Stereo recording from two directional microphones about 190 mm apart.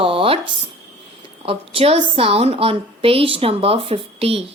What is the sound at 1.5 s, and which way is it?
A woman's voice, 30° right (ahead or behind).